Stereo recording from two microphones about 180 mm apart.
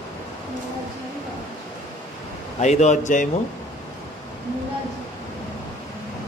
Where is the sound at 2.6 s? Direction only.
40° left (ahead or behind).